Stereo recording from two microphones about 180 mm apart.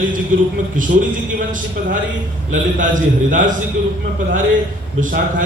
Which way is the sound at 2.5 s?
45° right (ahead or behind).